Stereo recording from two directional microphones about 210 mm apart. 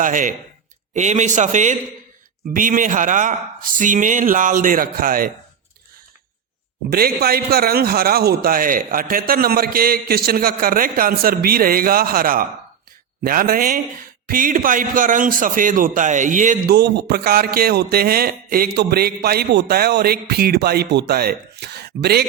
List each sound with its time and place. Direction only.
0.0 s speech: 40° right (ahead or behind)
6.9 s a man's voice: 45° right (ahead or behind)